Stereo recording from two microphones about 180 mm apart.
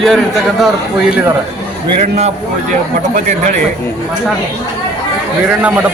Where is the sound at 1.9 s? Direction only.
35° right (ahead or behind).